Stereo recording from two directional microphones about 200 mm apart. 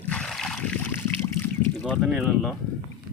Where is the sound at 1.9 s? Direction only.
Centre (ahead or behind).